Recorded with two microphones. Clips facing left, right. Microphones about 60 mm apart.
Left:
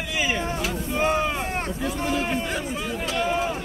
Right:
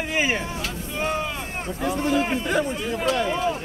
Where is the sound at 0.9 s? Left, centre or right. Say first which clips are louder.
Left 3 dB; left.